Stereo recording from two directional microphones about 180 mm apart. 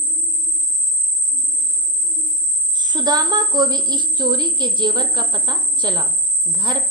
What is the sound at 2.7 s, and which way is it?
A woman's voice, 25° right (ahead or behind).